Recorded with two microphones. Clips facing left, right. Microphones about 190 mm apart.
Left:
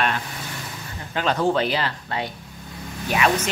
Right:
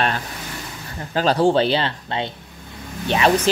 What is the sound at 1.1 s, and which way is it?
A man's voice, 35° right (ahead or behind).